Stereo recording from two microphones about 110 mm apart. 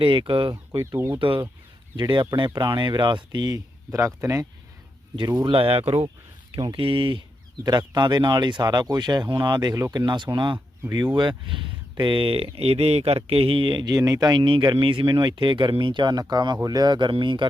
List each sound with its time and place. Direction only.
0.0 s speech: 50° right (ahead or behind)
0.8 s speech: 25° right (ahead or behind)
2.0 s speech: 45° right (ahead or behind)
3.9 s speech: 25° right (ahead or behind)
5.5 s speech: 60° right (ahead or behind)
6.7 s speech: 55° right (ahead or behind)
7.6 s speech: 40° right (ahead or behind)
10.0 s speech: 45° right (ahead or behind)
13.9 s speech: 30° right (ahead or behind); by 17.4 s 45° right (ahead or behind)